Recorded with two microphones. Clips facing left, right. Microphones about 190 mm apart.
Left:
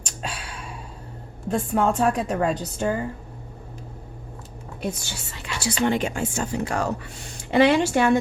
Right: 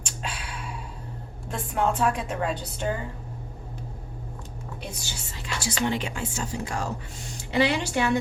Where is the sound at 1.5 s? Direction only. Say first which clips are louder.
Left 4 dB; 40° left (ahead or behind).